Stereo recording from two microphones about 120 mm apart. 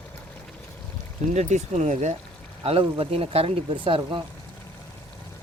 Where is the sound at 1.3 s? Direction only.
75° right (ahead or behind).